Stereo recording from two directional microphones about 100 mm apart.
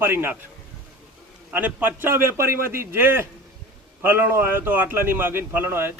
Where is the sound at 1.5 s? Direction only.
15° right (ahead or behind).